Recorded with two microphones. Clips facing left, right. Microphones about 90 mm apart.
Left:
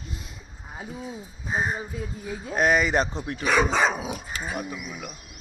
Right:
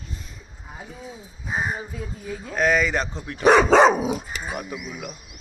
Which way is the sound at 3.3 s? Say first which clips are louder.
Right 8 dB; 65° right (ahead or behind).